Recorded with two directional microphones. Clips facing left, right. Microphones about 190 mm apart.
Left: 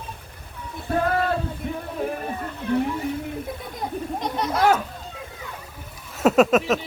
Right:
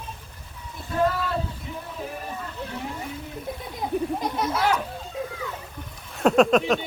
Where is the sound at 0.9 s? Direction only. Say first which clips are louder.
Left 2 dB; 60° left (ahead or behind).